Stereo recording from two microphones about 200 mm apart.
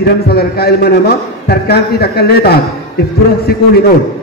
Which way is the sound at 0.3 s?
50° left (ahead or behind).